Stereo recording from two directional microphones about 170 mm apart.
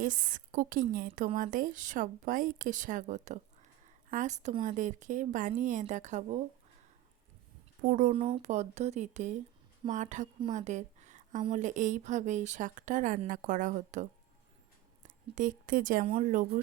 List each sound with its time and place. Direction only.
0.0 s speech: 50° right (ahead or behind)
7.8 s speech: 50° right (ahead or behind)
8.1 s speech: 35° right (ahead or behind)
10.5 s a sound: 45° right (ahead or behind)
11.5 s a woman's voice: 45° right (ahead or behind)
16.0 s speech: 35° right (ahead or behind)
16.3 s speech: 55° right (ahead or behind)